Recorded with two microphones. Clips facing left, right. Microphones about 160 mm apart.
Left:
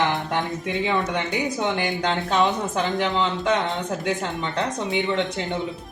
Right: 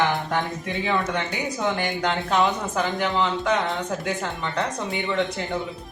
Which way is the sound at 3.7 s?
20° left (ahead or behind).